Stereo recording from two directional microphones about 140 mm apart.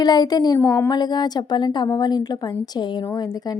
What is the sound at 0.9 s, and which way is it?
A woman's voice, 30° left (ahead or behind).